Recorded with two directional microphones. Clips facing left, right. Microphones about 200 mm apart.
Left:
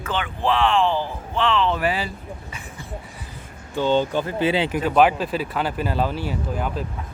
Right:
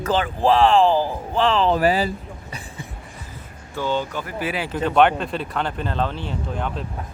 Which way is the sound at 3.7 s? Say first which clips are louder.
Left 4 dB; 25° left (ahead or behind).